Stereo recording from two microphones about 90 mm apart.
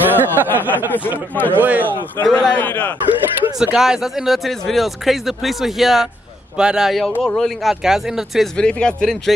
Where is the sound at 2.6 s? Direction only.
20° left (ahead or behind).